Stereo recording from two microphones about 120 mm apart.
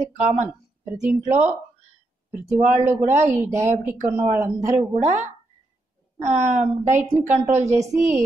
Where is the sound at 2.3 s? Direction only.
20° right (ahead or behind).